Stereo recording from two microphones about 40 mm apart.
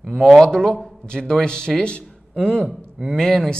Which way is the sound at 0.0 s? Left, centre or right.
Centre.